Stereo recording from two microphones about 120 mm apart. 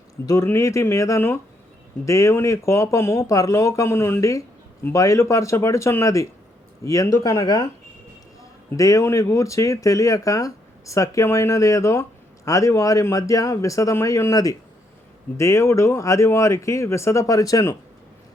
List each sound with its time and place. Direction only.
0.3 s speech: 20° left (ahead or behind)
8.7 s speech: 30° left (ahead or behind)